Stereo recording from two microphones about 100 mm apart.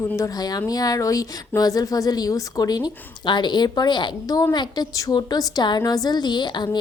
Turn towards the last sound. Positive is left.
turn(degrees=45)  # may be behind; listen again after turning